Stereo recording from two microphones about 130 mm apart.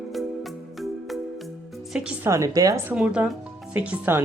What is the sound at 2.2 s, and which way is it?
Speech, 25° right (ahead or behind).